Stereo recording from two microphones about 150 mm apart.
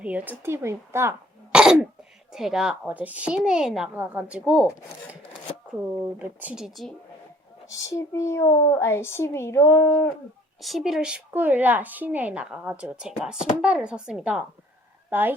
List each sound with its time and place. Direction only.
0.0 s speech: 10° right (ahead or behind)
1.5 s throat clearing: 5° right (ahead or behind)
2.3 s a woman's voice: 5° right (ahead or behind)
6.1 s a woman's voice: 10° right (ahead or behind)
7.9 s a child's voice: 20° left (ahead or behind)
10.6 s a woman's voice: centre (ahead or behind)